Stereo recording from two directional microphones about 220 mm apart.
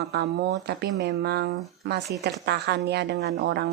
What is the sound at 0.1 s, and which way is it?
A woman's voice, 45° right (ahead or behind).